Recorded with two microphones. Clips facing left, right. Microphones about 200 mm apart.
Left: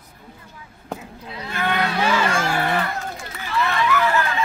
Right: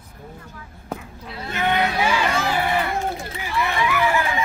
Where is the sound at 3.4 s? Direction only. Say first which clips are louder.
Left 2 dB; 15° right (ahead or behind).